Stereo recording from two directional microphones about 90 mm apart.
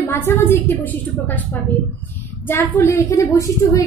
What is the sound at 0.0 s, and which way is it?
A woman's voice, 25° left (ahead or behind).